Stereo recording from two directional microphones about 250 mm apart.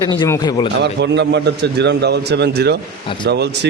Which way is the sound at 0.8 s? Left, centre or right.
Right.